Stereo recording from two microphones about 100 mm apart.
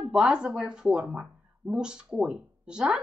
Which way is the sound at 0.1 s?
10° right (ahead or behind).